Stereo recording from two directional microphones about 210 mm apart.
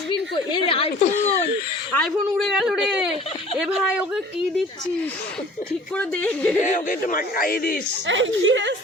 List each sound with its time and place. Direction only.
0.3 s speech: 25° left (ahead or behind)
1.9 s speech: 5° left (ahead or behind)
6.0 s speech: 5° left (ahead or behind)
6.6 s speech: 35° left (ahead or behind)
8.0 s a woman's voice: 60° right (ahead or behind)